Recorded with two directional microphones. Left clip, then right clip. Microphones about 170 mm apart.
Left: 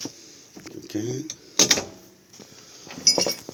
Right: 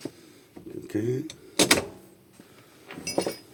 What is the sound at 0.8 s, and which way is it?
Speech, 40° right (ahead or behind).